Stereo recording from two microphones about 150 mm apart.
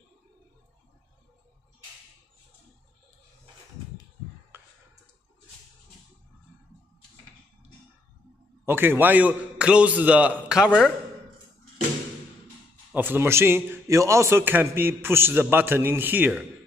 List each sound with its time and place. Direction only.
4.5 s a sound: 15° right (ahead or behind)
8.6 s a man's voice: 15° right (ahead or behind)
12.9 s a man's voice: 15° right (ahead or behind)